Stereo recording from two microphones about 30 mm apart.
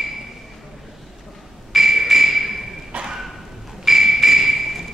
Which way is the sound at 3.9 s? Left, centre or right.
Centre.